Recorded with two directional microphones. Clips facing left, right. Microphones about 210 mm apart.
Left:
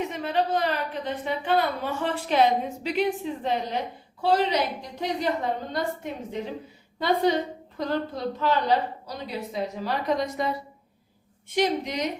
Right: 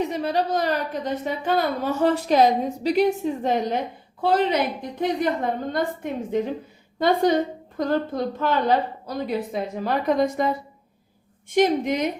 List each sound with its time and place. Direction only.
0.0 s a woman's voice: 35° right (ahead or behind)